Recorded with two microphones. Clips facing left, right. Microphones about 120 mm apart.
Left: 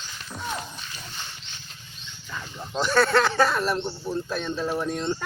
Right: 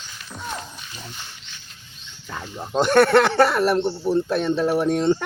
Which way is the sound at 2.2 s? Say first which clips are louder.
Right 4 dB; 50° right (ahead or behind).